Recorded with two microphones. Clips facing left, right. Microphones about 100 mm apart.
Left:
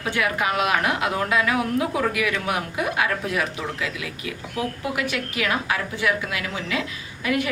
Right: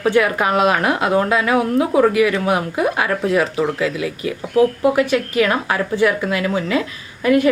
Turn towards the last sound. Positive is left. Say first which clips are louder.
# right 9 dB
turn(degrees=-40)  # may be behind; listen again after turning